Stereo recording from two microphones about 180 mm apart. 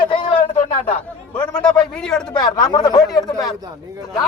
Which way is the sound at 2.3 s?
25° left (ahead or behind).